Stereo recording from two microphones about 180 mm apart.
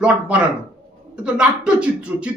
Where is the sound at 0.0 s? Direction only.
5° right (ahead or behind).